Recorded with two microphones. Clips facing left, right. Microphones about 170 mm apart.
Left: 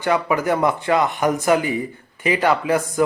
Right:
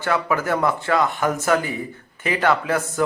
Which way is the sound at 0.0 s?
15° left (ahead or behind).